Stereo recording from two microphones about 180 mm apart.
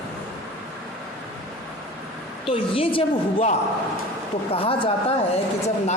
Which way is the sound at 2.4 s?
30° left (ahead or behind).